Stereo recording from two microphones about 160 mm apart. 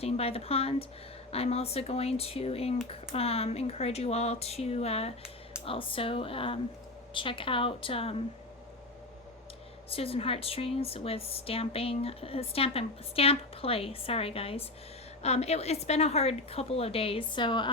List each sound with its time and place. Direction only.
0.0 s speech: 40° left (ahead or behind)
9.9 s speech: 35° left (ahead or behind)